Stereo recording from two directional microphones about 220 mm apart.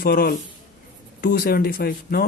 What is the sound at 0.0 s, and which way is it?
Speech, 45° left (ahead or behind).